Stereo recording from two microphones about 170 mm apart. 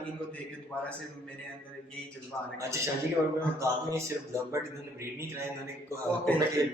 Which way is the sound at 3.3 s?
15° right (ahead or behind).